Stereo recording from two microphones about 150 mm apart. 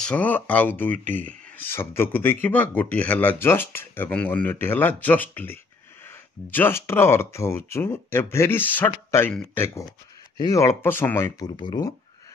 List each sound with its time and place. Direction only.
0.0 s speech: 10° left (ahead or behind)
10.3 s speech: 25° left (ahead or behind)
11.3 s speech: 30° left (ahead or behind)